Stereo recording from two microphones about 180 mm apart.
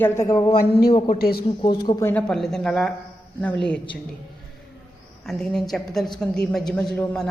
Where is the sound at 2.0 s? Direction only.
5° left (ahead or behind).